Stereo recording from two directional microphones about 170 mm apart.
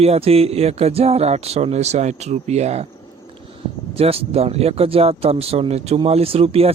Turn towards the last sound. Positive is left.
turn(degrees=-35)  # may be behind; listen again after turning